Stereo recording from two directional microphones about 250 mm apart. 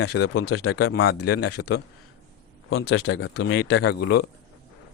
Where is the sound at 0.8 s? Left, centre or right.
Left.